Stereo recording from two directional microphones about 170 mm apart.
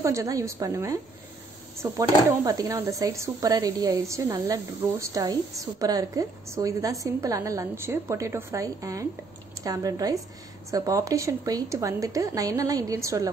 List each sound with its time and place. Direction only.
0.0 s speech: 20° right (ahead or behind)